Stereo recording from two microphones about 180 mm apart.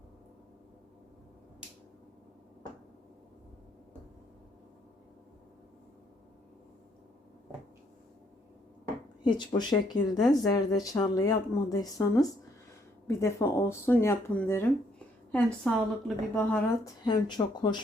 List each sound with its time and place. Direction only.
9.2 s speech: 25° left (ahead or behind); by 16.6 s 5° left (ahead or behind)
16.8 s speech: 25° left (ahead or behind)